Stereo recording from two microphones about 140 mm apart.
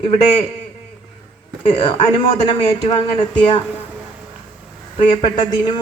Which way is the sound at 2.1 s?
35° left (ahead or behind).